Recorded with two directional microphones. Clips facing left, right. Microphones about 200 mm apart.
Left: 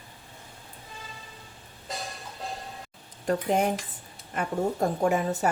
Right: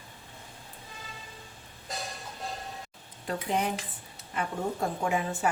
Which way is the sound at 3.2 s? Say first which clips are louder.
Left 5 dB; 45° left (ahead or behind).